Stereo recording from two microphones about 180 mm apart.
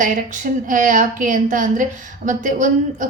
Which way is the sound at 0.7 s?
45° right (ahead or behind).